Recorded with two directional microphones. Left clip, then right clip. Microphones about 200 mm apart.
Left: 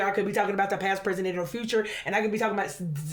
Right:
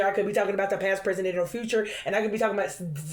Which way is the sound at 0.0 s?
40° left (ahead or behind).